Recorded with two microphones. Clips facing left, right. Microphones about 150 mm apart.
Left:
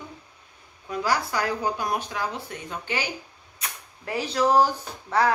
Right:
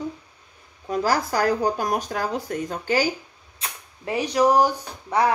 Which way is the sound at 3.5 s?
20° right (ahead or behind).